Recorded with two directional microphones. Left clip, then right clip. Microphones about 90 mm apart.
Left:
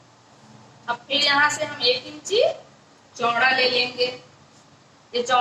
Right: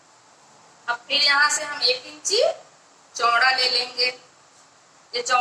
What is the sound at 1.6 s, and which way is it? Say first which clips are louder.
A woman's voice: left 1 dB; 35° left (ahead or behind).